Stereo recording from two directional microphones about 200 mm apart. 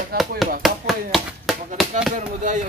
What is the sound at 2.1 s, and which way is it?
Speech, 40° right (ahead or behind).